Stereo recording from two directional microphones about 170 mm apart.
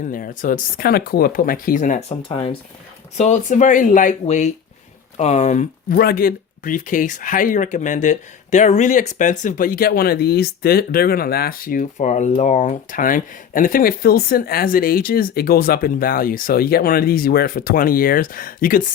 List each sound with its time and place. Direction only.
0.0 s speech: 55° left (ahead or behind); by 2.6 s 35° left (ahead or behind)
3.2 s speech: 45° left (ahead or behind)
6.0 s speech: 65° left (ahead or behind)